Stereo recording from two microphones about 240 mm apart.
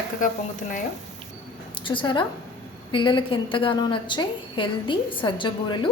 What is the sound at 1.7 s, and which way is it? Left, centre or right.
A woman's voice, left.